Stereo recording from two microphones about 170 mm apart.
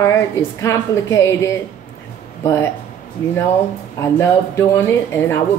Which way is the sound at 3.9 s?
15° left (ahead or behind).